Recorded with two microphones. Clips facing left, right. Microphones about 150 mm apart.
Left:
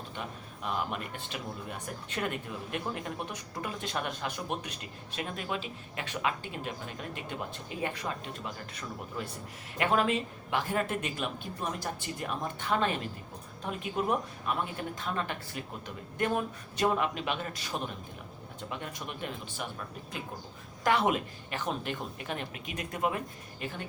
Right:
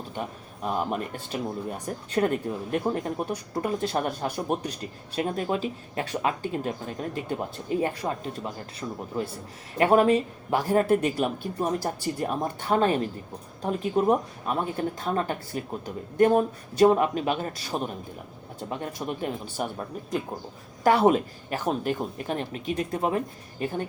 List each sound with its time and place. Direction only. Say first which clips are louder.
0.2 s speech: right 7 dB; 40° right (ahead or behind)
9.7 s speech: right 8 dB; 40° right (ahead or behind)